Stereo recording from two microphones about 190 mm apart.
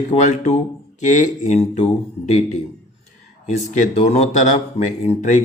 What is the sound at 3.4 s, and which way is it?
Speech, 40° left (ahead or behind).